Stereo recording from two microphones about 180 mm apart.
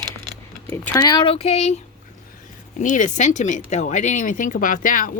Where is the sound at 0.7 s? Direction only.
10° left (ahead or behind).